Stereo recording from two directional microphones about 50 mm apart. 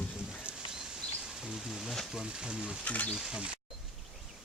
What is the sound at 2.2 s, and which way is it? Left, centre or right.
Speech, centre.